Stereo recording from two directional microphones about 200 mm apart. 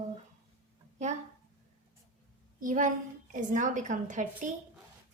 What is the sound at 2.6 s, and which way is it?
A woman's voice, 40° right (ahead or behind).